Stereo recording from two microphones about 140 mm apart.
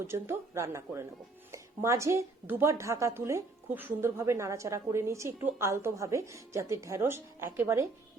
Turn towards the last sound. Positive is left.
turn(degrees=-20)  # may be behind; listen again after turning